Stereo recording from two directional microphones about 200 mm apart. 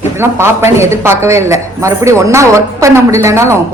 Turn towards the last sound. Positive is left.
turn(degrees=-15)  # may be behind; listen again after turning